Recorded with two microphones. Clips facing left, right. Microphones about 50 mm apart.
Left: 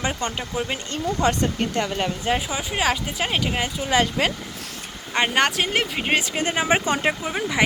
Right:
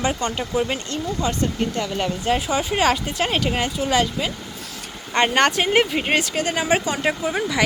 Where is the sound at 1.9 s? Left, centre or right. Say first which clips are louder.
Right 1 dB; centre.